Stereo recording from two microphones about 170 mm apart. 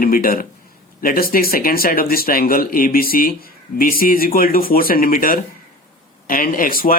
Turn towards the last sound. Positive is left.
turn(degrees=55)  # may be behind; listen again after turning